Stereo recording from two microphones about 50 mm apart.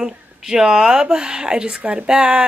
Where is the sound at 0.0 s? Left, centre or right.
Centre.